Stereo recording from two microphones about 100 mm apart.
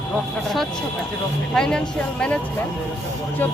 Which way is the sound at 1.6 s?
5° left (ahead or behind).